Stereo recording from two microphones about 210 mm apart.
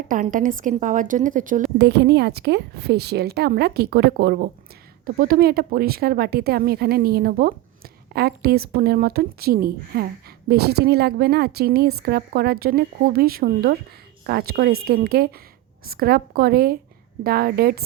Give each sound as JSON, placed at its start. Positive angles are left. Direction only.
{"t": 0.1, "sound": "a woman's voice", "side_deg": -40}
{"t": 1.8, "sound": "a woman's voice", "side_deg": -50}